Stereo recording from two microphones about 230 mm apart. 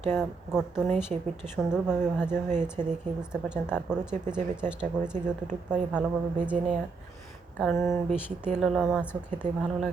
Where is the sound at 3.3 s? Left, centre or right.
Centre.